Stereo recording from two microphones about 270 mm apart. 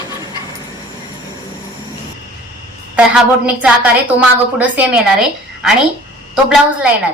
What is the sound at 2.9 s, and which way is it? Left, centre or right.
A woman's voice, centre.